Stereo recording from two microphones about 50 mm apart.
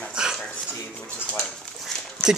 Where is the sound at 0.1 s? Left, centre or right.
Centre.